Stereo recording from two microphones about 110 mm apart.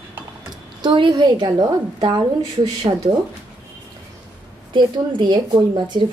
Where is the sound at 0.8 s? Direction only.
45° right (ahead or behind).